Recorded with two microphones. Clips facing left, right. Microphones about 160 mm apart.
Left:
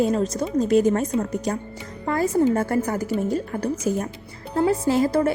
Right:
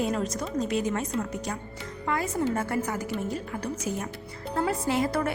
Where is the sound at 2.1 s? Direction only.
35° left (ahead or behind).